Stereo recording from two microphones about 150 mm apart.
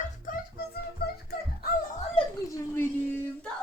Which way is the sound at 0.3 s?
60° left (ahead or behind).